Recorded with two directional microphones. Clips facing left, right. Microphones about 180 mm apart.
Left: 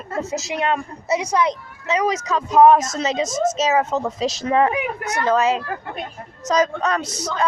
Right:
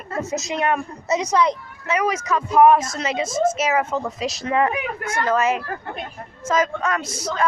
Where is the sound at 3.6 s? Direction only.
20° left (ahead or behind).